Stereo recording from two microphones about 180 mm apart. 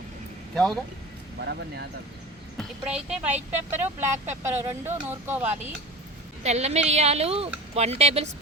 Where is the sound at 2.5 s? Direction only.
5° right (ahead or behind).